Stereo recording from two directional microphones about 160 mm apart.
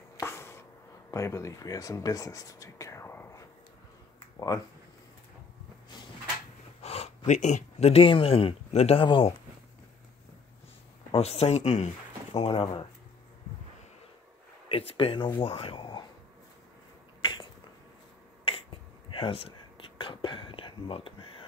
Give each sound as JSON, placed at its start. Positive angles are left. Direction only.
{"t": 0.2, "sound": "a sound", "side_deg": 15}
{"t": 1.1, "sound": "speech", "side_deg": 20}
{"t": 6.8, "sound": "speech", "side_deg": 40}
{"t": 11.1, "sound": "speech", "side_deg": 40}
{"t": 14.7, "sound": "speech", "side_deg": 35}
{"t": 17.2, "sound": "finger snapping", "side_deg": 30}
{"t": 18.4, "sound": "whispering", "side_deg": 35}